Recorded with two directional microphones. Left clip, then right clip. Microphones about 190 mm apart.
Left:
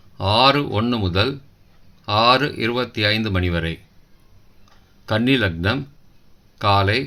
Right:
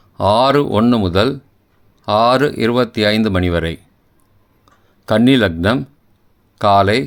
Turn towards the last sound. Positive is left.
turn(degrees=-55)  # may be behind; listen again after turning